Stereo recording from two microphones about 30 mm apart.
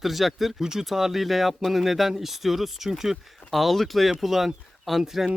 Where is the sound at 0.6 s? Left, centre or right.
Centre.